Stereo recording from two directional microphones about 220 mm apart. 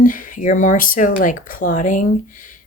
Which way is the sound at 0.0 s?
40° left (ahead or behind).